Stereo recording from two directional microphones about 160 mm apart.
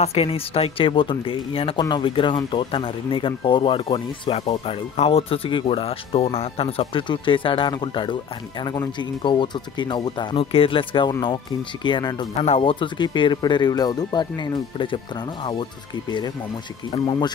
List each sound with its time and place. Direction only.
0.0 s speech: 40° left (ahead or behind)
12.4 s speech: 40° left (ahead or behind)